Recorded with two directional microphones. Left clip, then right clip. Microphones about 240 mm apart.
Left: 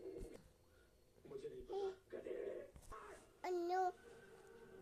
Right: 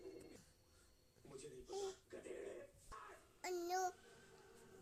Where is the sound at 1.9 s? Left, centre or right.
Right.